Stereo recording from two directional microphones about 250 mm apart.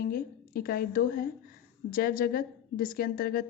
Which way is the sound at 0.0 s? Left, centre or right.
Left.